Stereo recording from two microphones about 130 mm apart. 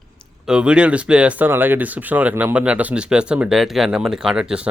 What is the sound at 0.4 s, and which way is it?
Speech, 5° right (ahead or behind).